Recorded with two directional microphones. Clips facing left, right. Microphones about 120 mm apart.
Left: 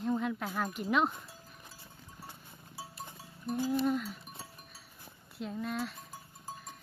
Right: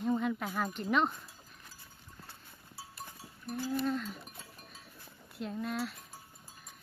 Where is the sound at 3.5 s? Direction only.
20° left (ahead or behind).